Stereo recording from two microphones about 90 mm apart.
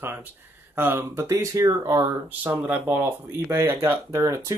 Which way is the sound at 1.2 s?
35° right (ahead or behind).